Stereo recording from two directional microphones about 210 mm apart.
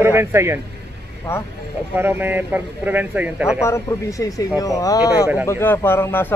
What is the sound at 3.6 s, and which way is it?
Speech, 15° left (ahead or behind).